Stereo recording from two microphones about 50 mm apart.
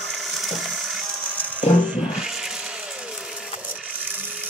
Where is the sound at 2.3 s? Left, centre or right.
Centre.